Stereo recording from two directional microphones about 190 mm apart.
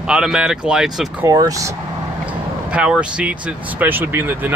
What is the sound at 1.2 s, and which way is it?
Speech, 20° right (ahead or behind).